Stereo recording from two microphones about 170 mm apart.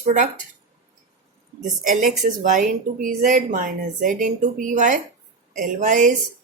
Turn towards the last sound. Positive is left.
turn(degrees=-50)  # may be behind; listen again after turning